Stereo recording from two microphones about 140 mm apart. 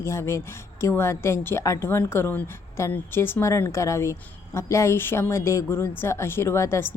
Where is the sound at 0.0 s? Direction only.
20° left (ahead or behind).